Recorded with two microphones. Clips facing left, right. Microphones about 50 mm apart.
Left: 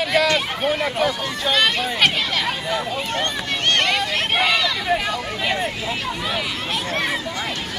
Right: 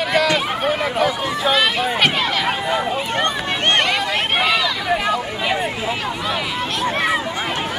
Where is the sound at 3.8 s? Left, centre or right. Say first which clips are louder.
Right 1 dB; centre.